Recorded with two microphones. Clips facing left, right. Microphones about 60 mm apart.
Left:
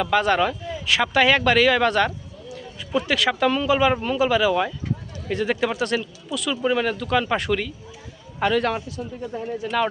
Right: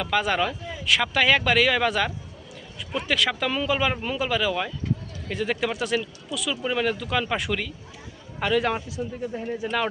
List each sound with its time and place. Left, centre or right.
0.0 s speech: centre
9.3 s speech: centre
9.6 s speech: centre